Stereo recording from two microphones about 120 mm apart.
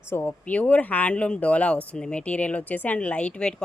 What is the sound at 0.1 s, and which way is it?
Speech, 15° left (ahead or behind).